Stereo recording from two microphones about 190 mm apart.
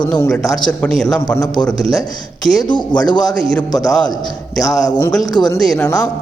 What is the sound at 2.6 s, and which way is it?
Speech, 25° left (ahead or behind).